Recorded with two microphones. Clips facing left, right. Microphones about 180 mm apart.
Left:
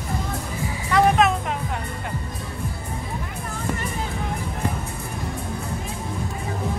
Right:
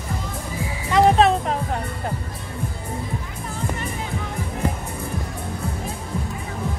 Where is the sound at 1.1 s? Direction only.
30° right (ahead or behind).